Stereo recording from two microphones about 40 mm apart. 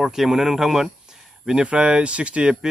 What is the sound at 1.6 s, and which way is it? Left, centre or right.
Speech, right.